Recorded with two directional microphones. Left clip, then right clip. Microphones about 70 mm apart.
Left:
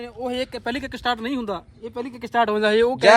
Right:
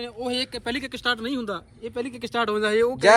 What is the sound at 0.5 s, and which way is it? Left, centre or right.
Speech, left.